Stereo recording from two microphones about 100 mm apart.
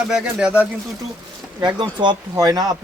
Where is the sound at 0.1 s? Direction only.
10° right (ahead or behind).